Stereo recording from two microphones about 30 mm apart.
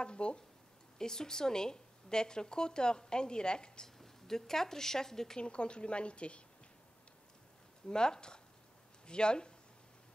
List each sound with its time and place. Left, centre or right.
0.0 s a woman's voice: left
0.9 s a woman's voice: left
3.8 s speech: centre
5.4 s a woman's voice: left
7.9 s a woman's voice: left